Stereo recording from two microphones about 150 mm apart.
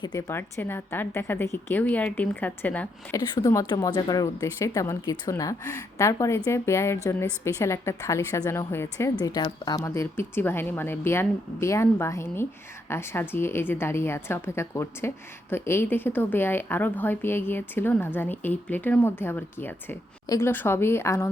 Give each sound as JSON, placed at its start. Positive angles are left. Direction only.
{"t": 0.0, "sound": "a woman's voice", "side_deg": 20}
{"t": 3.2, "sound": "a woman's voice", "side_deg": 25}